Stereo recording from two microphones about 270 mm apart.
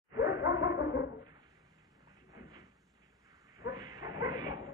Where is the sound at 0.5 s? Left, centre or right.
Left.